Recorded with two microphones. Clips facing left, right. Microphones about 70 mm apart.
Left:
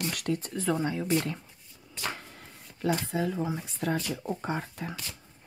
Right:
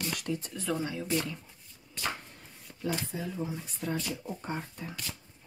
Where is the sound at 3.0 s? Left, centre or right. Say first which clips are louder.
Left 6 dB; left.